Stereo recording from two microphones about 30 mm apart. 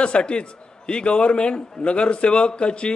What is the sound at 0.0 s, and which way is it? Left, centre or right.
A man's voice, left.